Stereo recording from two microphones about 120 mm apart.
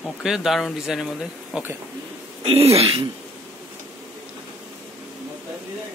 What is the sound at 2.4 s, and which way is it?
Speech, 55° right (ahead or behind).